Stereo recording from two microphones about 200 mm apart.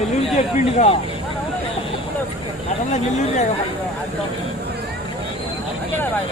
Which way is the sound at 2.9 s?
35° left (ahead or behind).